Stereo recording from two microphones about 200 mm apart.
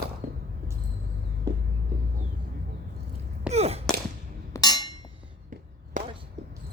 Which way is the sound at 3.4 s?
30° right (ahead or behind).